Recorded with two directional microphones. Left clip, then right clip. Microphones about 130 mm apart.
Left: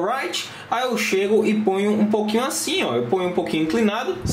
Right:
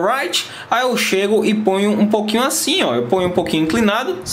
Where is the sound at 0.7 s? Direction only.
30° right (ahead or behind).